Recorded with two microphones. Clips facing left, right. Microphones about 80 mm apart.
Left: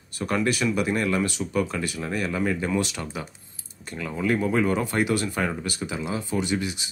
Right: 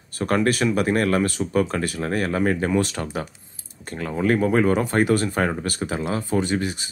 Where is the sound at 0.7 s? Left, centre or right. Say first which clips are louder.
Right 4 dB; right.